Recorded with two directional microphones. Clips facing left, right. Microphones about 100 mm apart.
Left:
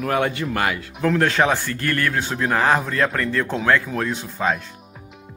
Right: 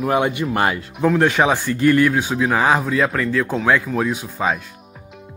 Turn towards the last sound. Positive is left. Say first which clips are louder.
# right 1 dB
turn(degrees=-5)  # may be behind; listen again after turning